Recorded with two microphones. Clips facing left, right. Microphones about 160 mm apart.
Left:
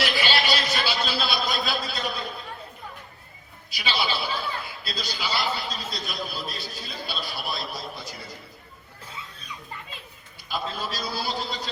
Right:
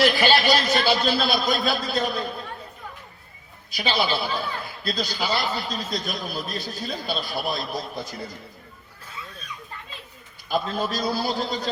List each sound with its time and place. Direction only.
0.0 s a man's voice: 45° right (ahead or behind)
3.7 s a man's voice: 45° right (ahead or behind)
10.5 s a man's voice: 45° right (ahead or behind)